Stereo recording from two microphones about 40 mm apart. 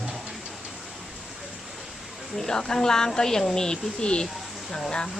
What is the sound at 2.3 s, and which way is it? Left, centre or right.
Speech, centre.